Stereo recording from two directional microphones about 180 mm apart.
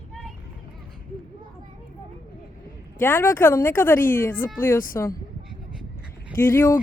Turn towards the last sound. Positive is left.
turn(degrees=15)  # may be behind; listen again after turning